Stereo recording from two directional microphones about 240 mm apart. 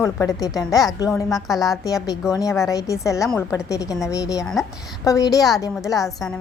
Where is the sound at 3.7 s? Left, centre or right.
Centre.